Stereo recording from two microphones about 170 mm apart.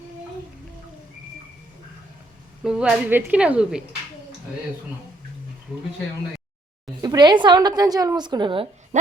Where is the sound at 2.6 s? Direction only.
5° right (ahead or behind).